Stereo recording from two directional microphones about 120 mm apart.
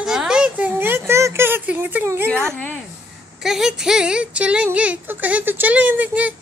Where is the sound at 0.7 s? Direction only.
20° right (ahead or behind).